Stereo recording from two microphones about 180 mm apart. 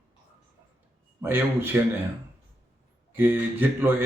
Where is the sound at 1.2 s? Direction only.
15° right (ahead or behind).